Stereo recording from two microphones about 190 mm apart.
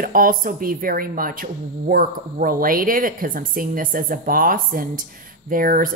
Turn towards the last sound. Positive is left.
turn(degrees=-45)  # may be behind; listen again after turning